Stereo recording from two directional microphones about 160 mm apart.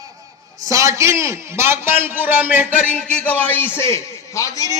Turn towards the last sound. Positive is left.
turn(degrees=20)  # may be behind; listen again after turning